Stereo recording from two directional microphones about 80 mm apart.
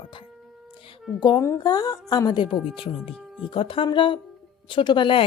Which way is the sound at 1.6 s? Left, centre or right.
Left.